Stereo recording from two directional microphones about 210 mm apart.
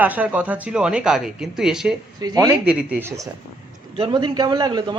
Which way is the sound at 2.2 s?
15° right (ahead or behind).